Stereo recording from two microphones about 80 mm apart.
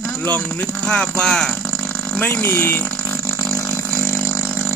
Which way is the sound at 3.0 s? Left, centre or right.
Left.